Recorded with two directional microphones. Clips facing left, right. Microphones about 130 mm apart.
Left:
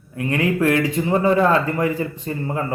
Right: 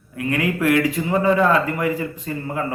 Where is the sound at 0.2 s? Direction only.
30° left (ahead or behind).